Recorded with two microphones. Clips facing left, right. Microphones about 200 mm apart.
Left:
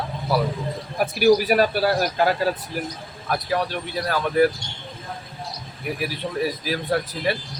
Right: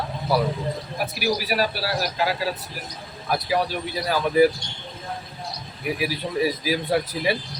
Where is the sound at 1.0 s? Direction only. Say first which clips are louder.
Left 10 dB; 50° left (ahead or behind).